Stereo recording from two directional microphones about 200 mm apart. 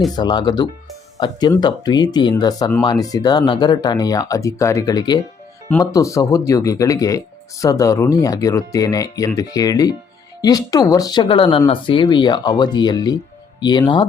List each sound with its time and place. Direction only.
0.2 s speech: 20° left (ahead or behind)